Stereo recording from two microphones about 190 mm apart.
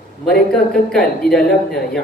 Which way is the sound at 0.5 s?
5° left (ahead or behind).